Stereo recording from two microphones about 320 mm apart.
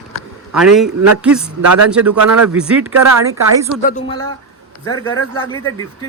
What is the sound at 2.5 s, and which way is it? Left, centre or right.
Speech, centre.